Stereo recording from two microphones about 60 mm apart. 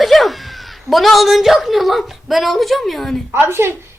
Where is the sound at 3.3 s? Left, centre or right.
Right.